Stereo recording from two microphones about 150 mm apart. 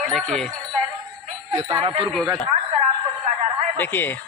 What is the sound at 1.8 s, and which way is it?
Speech, 40° right (ahead or behind).